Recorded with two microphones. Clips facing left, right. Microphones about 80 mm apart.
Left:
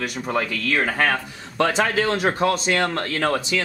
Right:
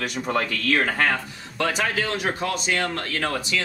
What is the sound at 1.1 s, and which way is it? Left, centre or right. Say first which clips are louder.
A man's voice: left 2 dB; left.